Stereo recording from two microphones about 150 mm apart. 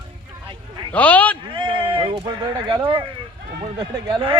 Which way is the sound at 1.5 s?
35° right (ahead or behind).